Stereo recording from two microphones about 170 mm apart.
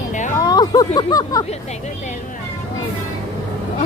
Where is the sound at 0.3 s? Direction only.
20° left (ahead or behind).